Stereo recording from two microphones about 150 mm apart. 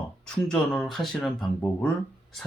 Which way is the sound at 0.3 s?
5° left (ahead or behind).